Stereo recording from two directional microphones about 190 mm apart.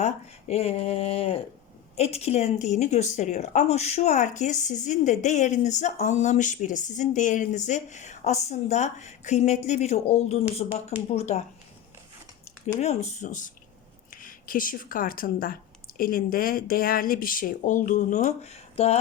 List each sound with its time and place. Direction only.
0.0 s a woman's voice: 35° left (ahead or behind)
12.6 s a woman's voice: 35° left (ahead or behind)